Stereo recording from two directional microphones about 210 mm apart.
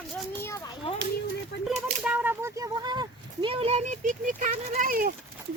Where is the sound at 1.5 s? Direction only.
55° left (ahead or behind).